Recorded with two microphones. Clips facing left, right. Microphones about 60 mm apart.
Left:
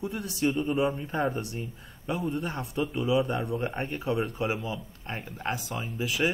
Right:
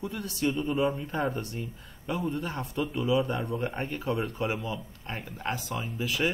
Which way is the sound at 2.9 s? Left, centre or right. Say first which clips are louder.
Even; centre.